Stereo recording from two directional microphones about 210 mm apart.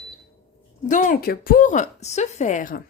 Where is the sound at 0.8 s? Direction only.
40° left (ahead or behind).